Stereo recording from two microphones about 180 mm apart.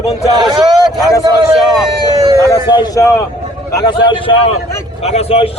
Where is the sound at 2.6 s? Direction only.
25° left (ahead or behind).